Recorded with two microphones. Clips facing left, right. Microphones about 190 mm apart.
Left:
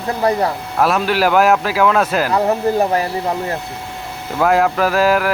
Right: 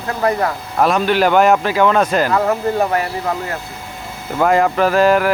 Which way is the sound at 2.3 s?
20° left (ahead or behind).